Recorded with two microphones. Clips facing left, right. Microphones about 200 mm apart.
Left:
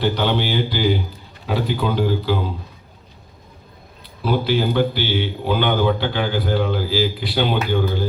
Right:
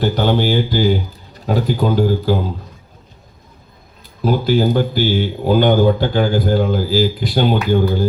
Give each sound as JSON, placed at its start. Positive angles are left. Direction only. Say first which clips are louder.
{"t": 0.0, "sound": "speech", "louder": "right 4 dB", "side_deg": -45}
{"t": 4.2, "sound": "speech", "louder": "right 4 dB", "side_deg": -45}